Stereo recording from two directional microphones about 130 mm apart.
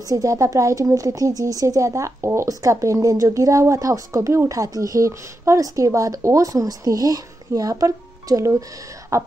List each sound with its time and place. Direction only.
0.1 s speech: 25° right (ahead or behind)